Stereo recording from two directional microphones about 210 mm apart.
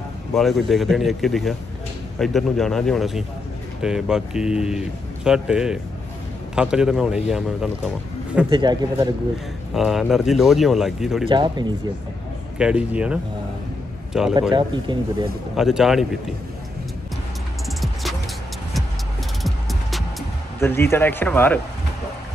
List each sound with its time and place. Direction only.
0.3 s speech: centre (ahead or behind)
8.5 s speech: 25° right (ahead or behind)
9.8 s speech: centre (ahead or behind)
11.2 s speech: 20° right (ahead or behind)
12.5 s speech: 5° right (ahead or behind)
14.5 s speech: 20° right (ahead or behind)
15.5 s speech: centre (ahead or behind)
19.4 s music: centre (ahead or behind)
20.6 s speech: 10° left (ahead or behind)